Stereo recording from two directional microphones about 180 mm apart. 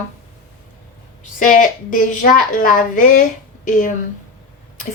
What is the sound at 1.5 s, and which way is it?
A woman's voice, 45° left (ahead or behind).